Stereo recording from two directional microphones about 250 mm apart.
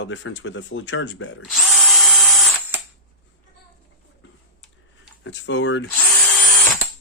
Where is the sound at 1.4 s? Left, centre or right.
Centre.